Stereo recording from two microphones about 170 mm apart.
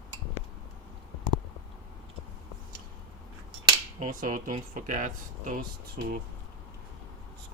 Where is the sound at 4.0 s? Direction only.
50° right (ahead or behind).